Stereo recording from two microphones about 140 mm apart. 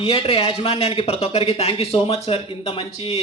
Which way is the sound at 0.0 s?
45° left (ahead or behind).